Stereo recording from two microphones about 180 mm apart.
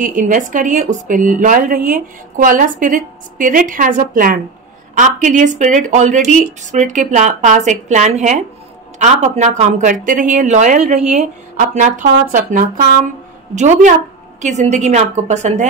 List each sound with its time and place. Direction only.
0.0 s a woman's voice: 45° right (ahead or behind)